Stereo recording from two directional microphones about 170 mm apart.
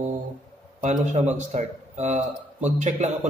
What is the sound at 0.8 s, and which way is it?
A man's voice, 45° right (ahead or behind).